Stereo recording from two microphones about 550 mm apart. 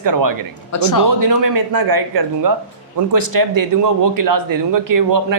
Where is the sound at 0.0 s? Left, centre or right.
Right.